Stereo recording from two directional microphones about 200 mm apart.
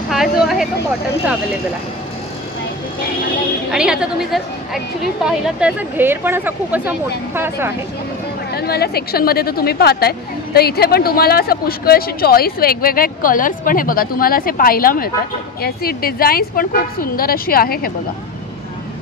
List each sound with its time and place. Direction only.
0.1 s speech: centre (ahead or behind)
3.7 s a woman's voice: 5° right (ahead or behind)
8.5 s a woman's voice: 50° left (ahead or behind)